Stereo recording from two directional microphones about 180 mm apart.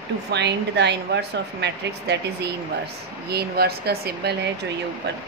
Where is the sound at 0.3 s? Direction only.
70° right (ahead or behind).